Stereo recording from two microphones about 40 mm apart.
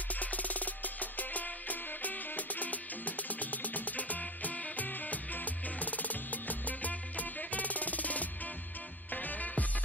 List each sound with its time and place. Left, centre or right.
0.1 s music: left